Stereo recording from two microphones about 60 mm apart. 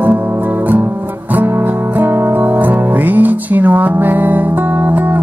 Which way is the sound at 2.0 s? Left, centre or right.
Right.